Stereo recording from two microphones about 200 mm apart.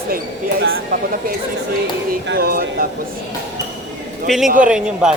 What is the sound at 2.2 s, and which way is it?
Speech, 50° right (ahead or behind).